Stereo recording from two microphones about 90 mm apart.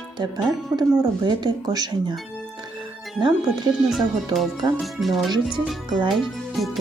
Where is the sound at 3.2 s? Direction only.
55° right (ahead or behind).